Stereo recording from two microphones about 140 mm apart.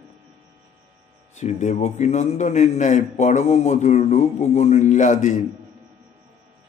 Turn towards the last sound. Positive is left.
turn(degrees=60)  # may be behind; listen again after turning